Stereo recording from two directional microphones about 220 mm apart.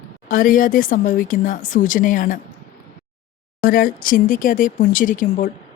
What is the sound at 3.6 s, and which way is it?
A woman's voice, 40° left (ahead or behind).